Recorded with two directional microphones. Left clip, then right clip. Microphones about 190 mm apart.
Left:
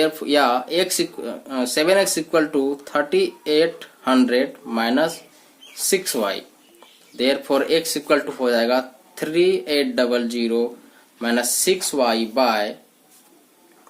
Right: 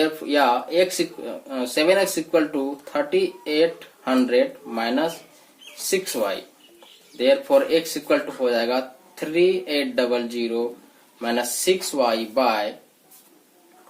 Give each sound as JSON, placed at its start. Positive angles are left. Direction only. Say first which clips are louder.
{"t": 0.0, "sound": "speech", "louder": "left 2 dB", "side_deg": 55}
{"t": 7.2, "sound": "speech", "louder": "right 2 dB", "side_deg": 60}